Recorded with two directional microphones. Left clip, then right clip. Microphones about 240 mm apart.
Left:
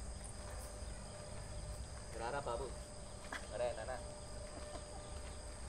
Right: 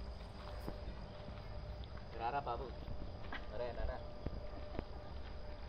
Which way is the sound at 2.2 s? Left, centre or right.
Right.